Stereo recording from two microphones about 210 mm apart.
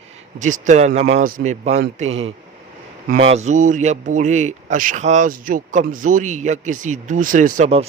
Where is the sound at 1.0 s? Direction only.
45° right (ahead or behind).